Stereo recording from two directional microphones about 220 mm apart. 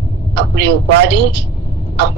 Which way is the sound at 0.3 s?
50° right (ahead or behind).